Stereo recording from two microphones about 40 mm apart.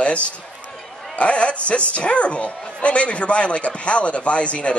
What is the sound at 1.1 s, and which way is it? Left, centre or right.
A man's voice, left.